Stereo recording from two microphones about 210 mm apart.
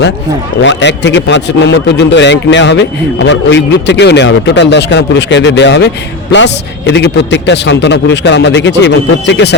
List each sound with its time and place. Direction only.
0.6 s a man's voice: 60° left (ahead or behind)